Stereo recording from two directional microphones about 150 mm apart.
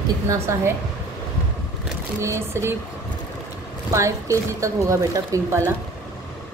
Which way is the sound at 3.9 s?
20° right (ahead or behind).